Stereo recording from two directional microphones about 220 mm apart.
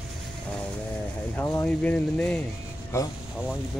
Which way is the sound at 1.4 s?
10° left (ahead or behind).